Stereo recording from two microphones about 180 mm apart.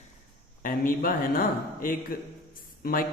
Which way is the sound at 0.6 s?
50° left (ahead or behind).